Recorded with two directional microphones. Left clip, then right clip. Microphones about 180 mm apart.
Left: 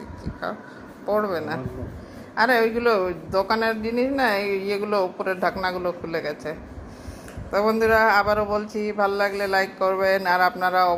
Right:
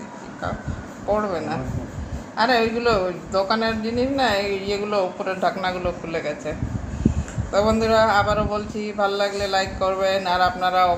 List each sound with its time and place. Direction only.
1.0 s a man's voice: 40° left (ahead or behind)
7.9 s speech: 45° left (ahead or behind)